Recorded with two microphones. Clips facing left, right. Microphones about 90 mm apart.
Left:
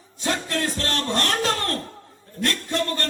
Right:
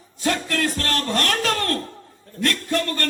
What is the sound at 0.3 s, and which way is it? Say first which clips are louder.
A man's voice: right 2 dB; 25° left (ahead or behind).